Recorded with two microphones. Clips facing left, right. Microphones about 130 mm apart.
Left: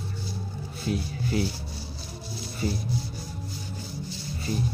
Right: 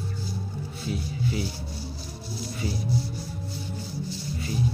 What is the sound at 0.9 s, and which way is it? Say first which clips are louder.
Speech: left 2 dB; 55° left (ahead or behind).